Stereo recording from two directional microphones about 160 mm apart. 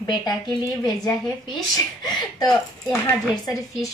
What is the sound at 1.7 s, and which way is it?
Speech, 25° left (ahead or behind).